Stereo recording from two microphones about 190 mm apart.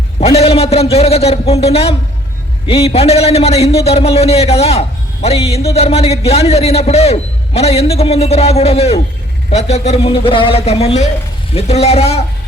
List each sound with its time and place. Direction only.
0.2 s a man's voice: 35° left (ahead or behind)